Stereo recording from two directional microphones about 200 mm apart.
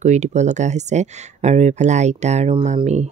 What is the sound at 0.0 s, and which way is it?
Speech, 35° right (ahead or behind).